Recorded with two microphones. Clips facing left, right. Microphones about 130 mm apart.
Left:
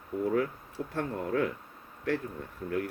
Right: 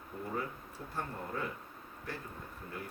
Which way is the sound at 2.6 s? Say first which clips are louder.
Left 15 dB; 90° left.